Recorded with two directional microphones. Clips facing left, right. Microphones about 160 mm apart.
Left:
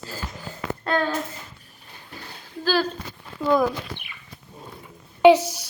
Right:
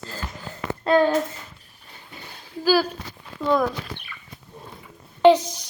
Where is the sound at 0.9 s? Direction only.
20° right (ahead or behind).